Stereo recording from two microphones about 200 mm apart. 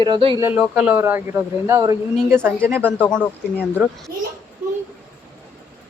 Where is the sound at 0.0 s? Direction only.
25° right (ahead or behind).